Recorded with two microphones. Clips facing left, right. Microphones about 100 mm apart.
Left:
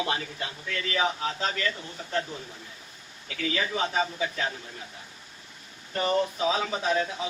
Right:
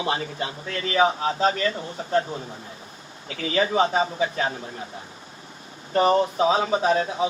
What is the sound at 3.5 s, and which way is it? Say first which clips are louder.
Speech: right 8 dB; 30° right (ahead or behind).